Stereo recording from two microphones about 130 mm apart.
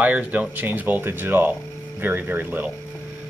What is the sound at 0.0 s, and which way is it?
Speech, 10° right (ahead or behind).